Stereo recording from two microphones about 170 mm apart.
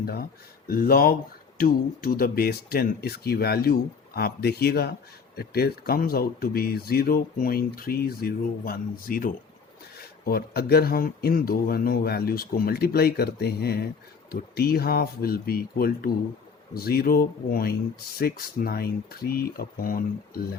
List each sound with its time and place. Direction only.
0.0 s speech: 65° left (ahead or behind)